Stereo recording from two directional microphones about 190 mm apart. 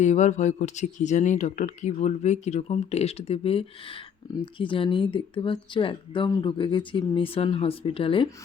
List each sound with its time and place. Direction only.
0.0 s speech: 40° left (ahead or behind)